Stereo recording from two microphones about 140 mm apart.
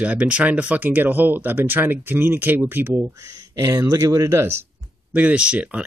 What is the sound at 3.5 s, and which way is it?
Speech, 25° right (ahead or behind).